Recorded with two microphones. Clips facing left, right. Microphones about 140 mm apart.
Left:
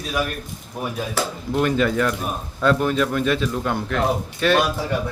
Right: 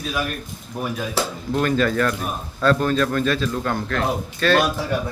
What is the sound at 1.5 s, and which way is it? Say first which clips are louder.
A man's voice: left 1 dB; 15° left (ahead or behind).